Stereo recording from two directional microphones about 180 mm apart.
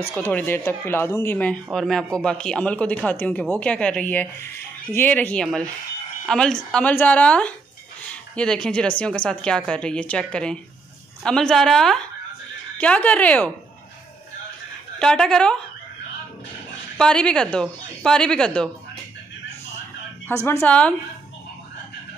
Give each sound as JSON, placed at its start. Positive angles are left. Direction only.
{"t": 0.1, "sound": "speech", "side_deg": 5}
{"t": 15.0, "sound": "speech", "side_deg": 5}
{"t": 17.0, "sound": "speech", "side_deg": 5}
{"t": 20.4, "sound": "speech", "side_deg": 10}